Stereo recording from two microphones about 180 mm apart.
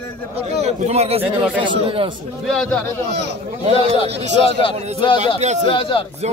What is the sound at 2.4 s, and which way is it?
Speech, 5° left (ahead or behind).